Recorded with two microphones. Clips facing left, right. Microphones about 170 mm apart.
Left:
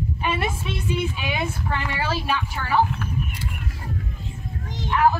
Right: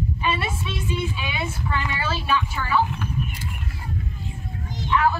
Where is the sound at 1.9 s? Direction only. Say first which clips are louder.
Even; 60° left (ahead or behind).